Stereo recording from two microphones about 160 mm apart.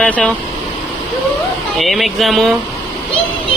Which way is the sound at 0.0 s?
10° left (ahead or behind).